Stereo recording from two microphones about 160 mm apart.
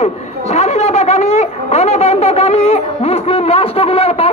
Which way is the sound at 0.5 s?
45° left (ahead or behind).